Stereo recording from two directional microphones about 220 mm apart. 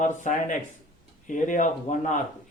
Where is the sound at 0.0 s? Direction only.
35° left (ahead or behind).